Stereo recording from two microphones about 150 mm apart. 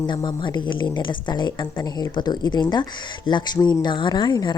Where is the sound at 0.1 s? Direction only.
30° left (ahead or behind).